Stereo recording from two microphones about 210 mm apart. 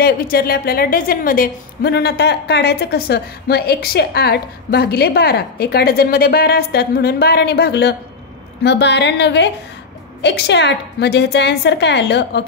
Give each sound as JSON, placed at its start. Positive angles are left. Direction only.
{"t": 0.0, "sound": "a woman's voice", "side_deg": 45}